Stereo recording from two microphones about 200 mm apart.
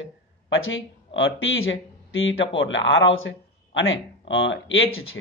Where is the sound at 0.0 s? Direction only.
75° left (ahead or behind).